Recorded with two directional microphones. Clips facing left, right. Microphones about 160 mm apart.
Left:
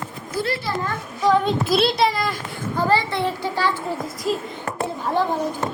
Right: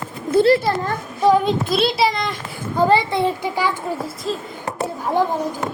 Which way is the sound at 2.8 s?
20° right (ahead or behind).